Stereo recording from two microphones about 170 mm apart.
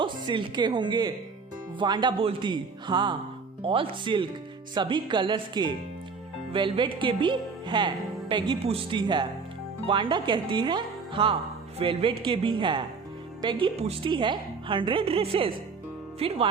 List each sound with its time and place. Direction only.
0.0 s a woman's voice: 30° right (ahead or behind)
10.5 s music: 25° right (ahead or behind)
11.8 s a woman's voice: 30° right (ahead or behind)